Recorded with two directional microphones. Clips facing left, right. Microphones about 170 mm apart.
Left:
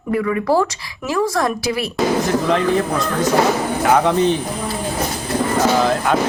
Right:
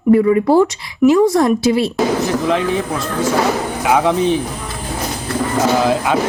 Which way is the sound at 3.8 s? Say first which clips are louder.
Right 1 dB; centre (ahead or behind).